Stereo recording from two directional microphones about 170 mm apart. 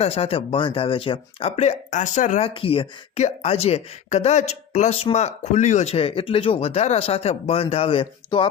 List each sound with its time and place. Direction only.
0.0 s speech: 35° left (ahead or behind)
2.5 s speech: 30° left (ahead or behind)